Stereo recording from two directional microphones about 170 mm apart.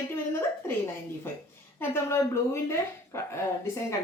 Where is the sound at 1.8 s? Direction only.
15° left (ahead or behind).